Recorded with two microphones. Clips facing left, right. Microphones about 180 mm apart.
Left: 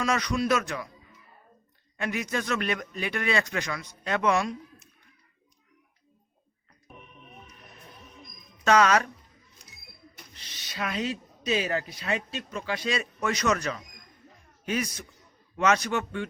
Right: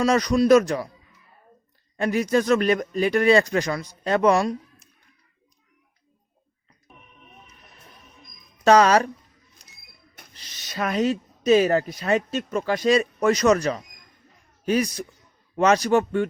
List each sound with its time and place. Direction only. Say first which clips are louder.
0.0 s speech: right 8 dB; 35° right (ahead or behind)
2.0 s speech: right 9 dB; 35° right (ahead or behind)
8.6 s speech: right 5 dB; 35° right (ahead or behind)
10.3 s speech: right 7 dB; 40° right (ahead or behind)